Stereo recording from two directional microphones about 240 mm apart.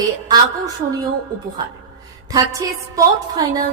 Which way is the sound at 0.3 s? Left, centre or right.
Centre.